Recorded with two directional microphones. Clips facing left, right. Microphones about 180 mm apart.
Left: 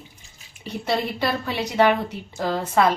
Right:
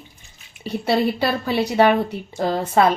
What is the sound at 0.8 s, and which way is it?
A woman's voice, 30° right (ahead or behind).